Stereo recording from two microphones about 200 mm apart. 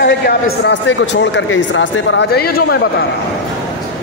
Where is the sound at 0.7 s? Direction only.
65° left (ahead or behind).